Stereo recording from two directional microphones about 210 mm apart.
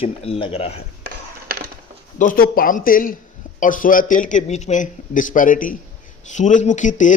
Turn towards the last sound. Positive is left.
turn(degrees=35)  # may be behind; listen again after turning